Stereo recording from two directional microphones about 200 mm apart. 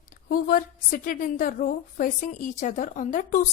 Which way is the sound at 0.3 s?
45° left (ahead or behind).